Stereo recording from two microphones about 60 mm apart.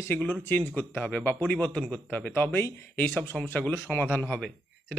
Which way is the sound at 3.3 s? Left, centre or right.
Centre.